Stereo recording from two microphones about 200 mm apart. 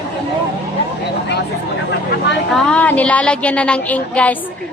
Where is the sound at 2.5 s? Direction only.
5° left (ahead or behind).